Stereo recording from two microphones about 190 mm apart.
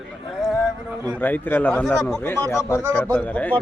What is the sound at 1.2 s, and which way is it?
A man's voice, 10° left (ahead or behind).